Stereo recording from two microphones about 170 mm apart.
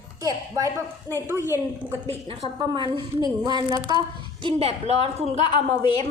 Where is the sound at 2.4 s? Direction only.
25° right (ahead or behind).